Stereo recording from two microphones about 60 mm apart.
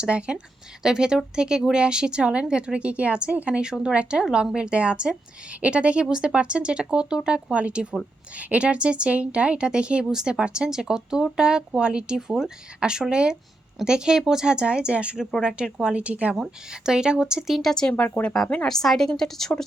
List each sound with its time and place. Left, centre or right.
0.0 s a woman's voice: centre
16.3 s a woman's voice: centre
17.6 s a woman's voice: centre
17.9 s speech: left
18.7 s a woman's voice: centre